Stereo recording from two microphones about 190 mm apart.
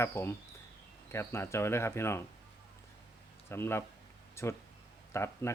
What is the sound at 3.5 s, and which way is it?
Speech, 10° left (ahead or behind).